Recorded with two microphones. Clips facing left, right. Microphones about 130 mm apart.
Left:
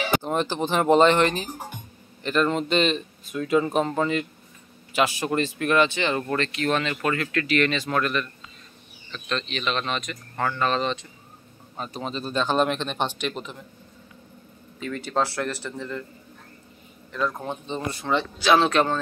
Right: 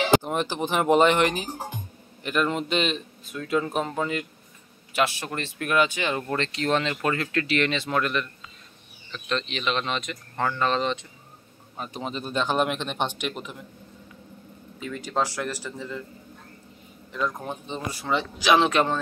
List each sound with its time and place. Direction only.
0.2 s speech: 5° right (ahead or behind)
1.5 s speech: 30° right (ahead or behind)
2.2 s speech: 10° right (ahead or behind)
6.3 s speech: 25° right (ahead or behind)
14.8 s speech: 10° right (ahead or behind)
17.5 s speech: 5° right (ahead or behind)